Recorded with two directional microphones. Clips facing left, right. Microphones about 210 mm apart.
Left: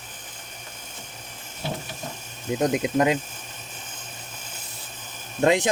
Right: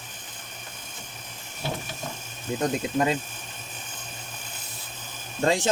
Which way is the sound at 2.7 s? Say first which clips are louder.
Left 3 dB; 15° left (ahead or behind).